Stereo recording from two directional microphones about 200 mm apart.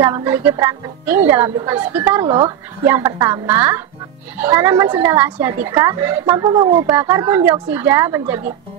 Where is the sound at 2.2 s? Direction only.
25° right (ahead or behind).